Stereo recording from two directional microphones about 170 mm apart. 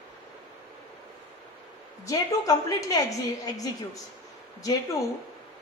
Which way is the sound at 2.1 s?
20° left (ahead or behind).